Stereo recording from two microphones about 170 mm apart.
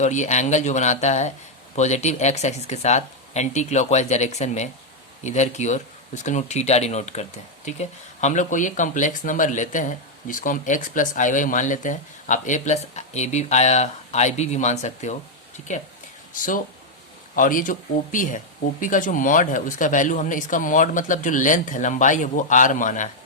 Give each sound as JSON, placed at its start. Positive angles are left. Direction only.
{"t": 0.0, "sound": "speech", "side_deg": 45}